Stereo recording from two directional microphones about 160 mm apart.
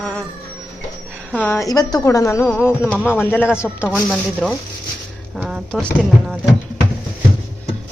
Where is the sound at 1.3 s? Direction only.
10° left (ahead or behind).